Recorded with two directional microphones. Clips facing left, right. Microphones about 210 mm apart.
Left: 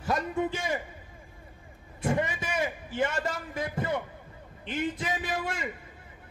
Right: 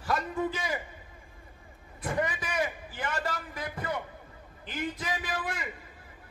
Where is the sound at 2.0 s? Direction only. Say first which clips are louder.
Left 3 dB; 25° left (ahead or behind).